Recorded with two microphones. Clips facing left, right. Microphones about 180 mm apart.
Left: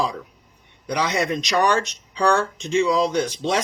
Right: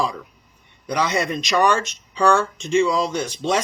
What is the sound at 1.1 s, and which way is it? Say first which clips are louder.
Speech: left 1 dB; 15° left (ahead or behind).